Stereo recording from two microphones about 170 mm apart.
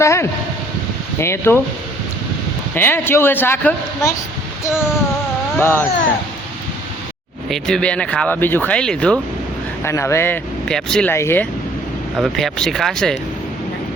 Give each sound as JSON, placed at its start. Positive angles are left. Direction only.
{"t": 0.0, "sound": "speech", "side_deg": 15}
{"t": 2.7, "sound": "speech", "side_deg": 15}
{"t": 7.5, "sound": "speech", "side_deg": 5}
{"t": 9.8, "sound": "speech", "side_deg": 15}
{"t": 11.1, "sound": "speech", "side_deg": 15}
{"t": 12.1, "sound": "speech", "side_deg": 0}